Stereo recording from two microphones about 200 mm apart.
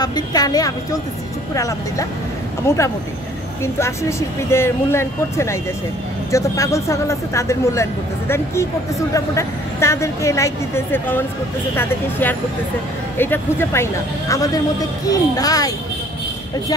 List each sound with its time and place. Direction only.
0.0 s a woman's voice: 20° left (ahead or behind)
4.4 s a woman's voice: 15° left (ahead or behind)